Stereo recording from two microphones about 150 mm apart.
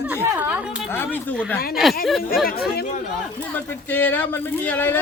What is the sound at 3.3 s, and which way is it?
Speech, 10° left (ahead or behind).